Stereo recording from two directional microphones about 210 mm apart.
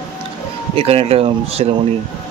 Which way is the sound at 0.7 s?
30° right (ahead or behind).